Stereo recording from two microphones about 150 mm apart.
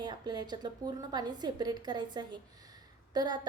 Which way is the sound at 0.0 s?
30° right (ahead or behind).